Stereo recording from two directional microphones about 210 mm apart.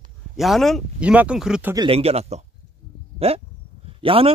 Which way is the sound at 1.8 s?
25° right (ahead or behind).